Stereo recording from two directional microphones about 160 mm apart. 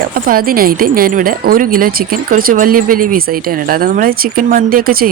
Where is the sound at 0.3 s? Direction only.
65° right (ahead or behind).